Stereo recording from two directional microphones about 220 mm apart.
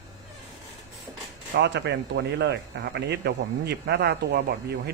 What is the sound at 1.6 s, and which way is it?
Speech, 50° right (ahead or behind).